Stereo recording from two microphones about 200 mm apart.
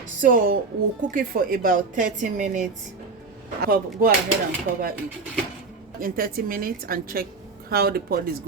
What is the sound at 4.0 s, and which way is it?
Speech, 45° right (ahead or behind).